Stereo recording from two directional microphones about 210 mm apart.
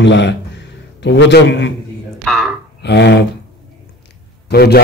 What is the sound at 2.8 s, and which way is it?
Speech, 55° left (ahead or behind).